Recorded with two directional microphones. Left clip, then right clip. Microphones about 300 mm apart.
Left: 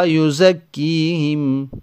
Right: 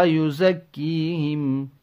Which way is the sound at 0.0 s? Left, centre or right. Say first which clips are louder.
Left 5 dB; left.